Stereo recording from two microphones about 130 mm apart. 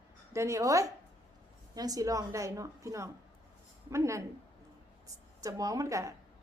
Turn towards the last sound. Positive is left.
turn(degrees=-25)  # may be behind; listen again after turning